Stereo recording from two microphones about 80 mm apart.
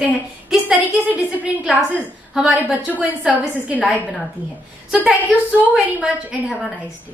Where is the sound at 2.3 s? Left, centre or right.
Centre.